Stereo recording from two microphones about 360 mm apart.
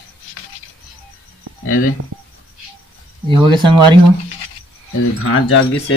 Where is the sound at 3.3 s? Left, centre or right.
Centre.